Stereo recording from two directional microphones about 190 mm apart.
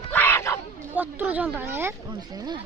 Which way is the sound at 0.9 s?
10° right (ahead or behind).